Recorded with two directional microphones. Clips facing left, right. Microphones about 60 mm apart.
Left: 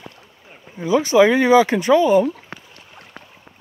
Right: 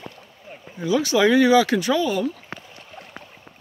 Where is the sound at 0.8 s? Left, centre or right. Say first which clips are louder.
Left 5 dB; left.